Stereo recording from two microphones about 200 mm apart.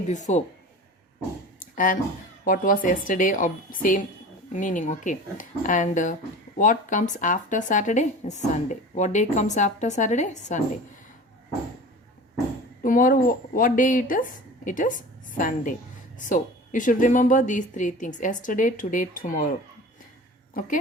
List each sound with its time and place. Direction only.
0.1 s speech: 35° left (ahead or behind)
1.5 s a sound: 40° left (ahead or behind)
2.4 s a woman's voice: 45° left (ahead or behind)
12.8 s speech: 40° left (ahead or behind)
20.5 s speech: 40° left (ahead or behind)